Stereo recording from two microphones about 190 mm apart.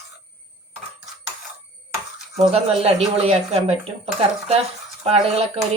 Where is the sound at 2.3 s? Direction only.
30° right (ahead or behind).